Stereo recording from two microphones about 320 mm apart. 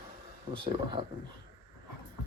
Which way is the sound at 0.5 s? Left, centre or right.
Centre.